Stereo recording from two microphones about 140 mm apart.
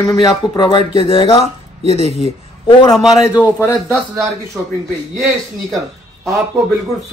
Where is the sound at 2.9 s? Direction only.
Centre (ahead or behind).